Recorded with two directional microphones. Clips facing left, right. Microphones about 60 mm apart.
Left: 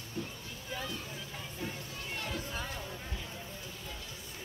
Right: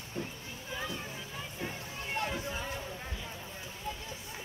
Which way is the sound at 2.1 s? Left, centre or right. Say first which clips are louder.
Right 5 dB; right.